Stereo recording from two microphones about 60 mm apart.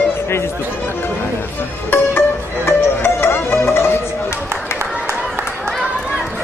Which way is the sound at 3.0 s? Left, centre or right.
Left.